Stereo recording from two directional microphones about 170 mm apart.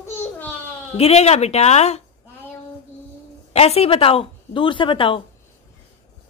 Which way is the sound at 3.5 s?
35° left (ahead or behind).